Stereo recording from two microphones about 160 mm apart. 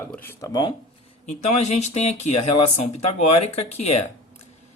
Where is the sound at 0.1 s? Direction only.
15° left (ahead or behind).